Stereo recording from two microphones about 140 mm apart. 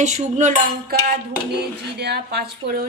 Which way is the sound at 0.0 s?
55° right (ahead or behind).